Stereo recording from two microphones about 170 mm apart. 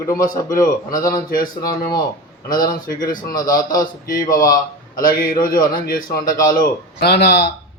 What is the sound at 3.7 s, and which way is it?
Speech, 55° left (ahead or behind).